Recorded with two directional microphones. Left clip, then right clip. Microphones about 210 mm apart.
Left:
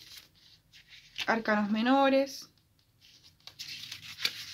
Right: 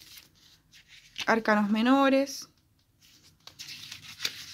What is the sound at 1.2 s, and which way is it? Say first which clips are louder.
Speech: right 4 dB; 35° right (ahead or behind).